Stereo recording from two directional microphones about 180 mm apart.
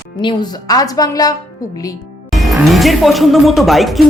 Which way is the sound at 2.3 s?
Centre (ahead or behind).